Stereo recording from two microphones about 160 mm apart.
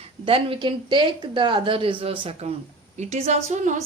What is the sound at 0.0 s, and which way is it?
Speech, 35° right (ahead or behind).